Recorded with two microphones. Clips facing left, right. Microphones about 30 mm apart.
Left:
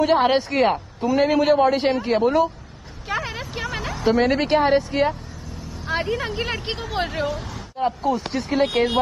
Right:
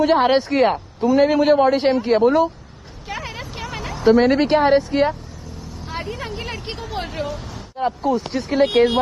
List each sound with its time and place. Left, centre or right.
0.0 s speech: centre
3.1 s vehicle: centre
4.1 s speech: centre
5.9 s speech: centre